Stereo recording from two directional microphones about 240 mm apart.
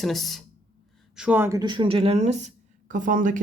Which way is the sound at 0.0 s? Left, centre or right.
Centre.